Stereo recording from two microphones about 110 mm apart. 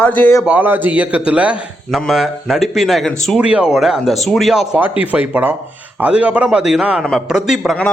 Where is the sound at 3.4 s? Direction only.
10° right (ahead or behind).